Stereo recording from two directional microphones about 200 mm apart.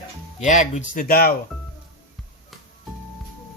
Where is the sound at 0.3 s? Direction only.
40° left (ahead or behind).